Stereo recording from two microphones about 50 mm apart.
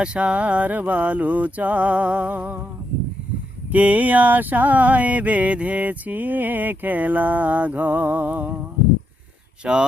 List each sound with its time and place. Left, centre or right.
0.0 s mantra: right
3.7 s a sound: right
9.6 s mantra: right